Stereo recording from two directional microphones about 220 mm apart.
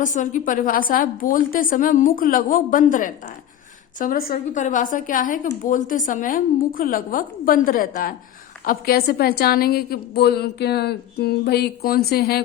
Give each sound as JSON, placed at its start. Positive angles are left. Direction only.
{"t": 0.0, "sound": "a woman's voice", "side_deg": 35}